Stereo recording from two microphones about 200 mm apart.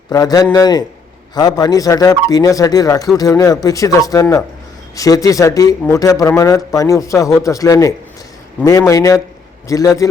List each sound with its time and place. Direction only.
0.1 s a man's voice: 20° left (ahead or behind)